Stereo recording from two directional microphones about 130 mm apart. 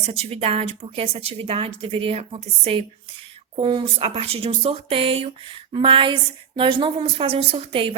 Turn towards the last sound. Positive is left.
turn(degrees=-45)  # may be behind; listen again after turning